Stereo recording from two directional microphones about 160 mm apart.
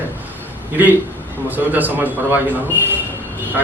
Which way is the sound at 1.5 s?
10° right (ahead or behind).